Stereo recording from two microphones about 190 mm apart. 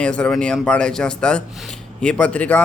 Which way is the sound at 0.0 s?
5° left (ahead or behind).